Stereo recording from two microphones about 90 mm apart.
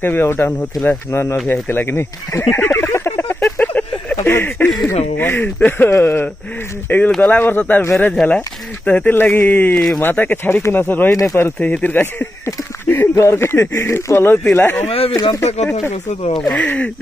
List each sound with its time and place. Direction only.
0.0 s speech: 25° left (ahead or behind)
1.5 s a sound: 25° left (ahead or behind)
4.2 s speech: 25° left (ahead or behind)
8.1 s speech: 10° left (ahead or behind)
8.4 s speech: 20° left (ahead or behind)
12.4 s a sound: 25° left (ahead or behind)
13.1 s speech: 30° left (ahead or behind)
14.9 s speech: 90° left
16.2 s speech: 90° left
16.5 s speech: 15° left (ahead or behind)